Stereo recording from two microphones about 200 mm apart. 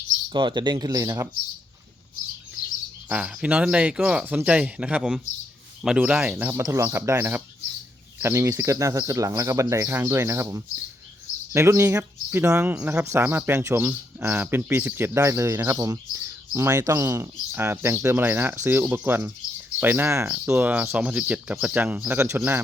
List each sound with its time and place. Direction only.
0.3 s speech: 25° right (ahead or behind)
3.1 s speech: 5° right (ahead or behind)